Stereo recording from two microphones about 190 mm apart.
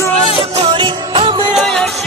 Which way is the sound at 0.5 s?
30° right (ahead or behind).